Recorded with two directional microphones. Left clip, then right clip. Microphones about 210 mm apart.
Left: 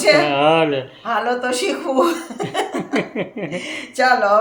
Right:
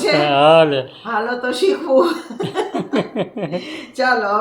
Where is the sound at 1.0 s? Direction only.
50° left (ahead or behind).